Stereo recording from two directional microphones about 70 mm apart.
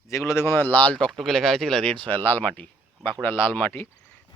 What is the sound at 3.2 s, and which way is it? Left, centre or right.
Speech, left.